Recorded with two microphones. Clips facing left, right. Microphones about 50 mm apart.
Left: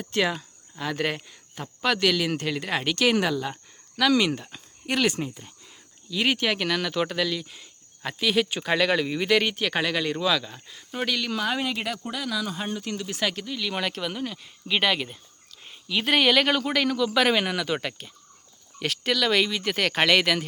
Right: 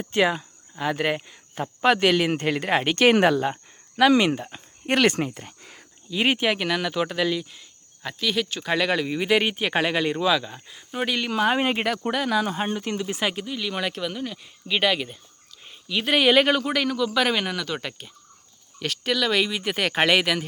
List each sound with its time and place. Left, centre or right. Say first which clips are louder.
0.0 s speech: right 4 dB; centre
1.5 s speech: right 5 dB; right
3.5 s speech: right 3 dB; right
4.9 s speech: right 4 dB; right
6.1 s speech: right 2 dB; right
6.5 s speech: right 2 dB; centre
7.5 s speech: left 1 dB; centre
11.3 s speech: right 5 dB; right; by 20.4 s centre